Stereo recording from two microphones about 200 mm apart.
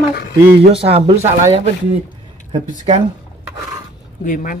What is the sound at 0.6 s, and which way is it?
Speech, 30° right (ahead or behind).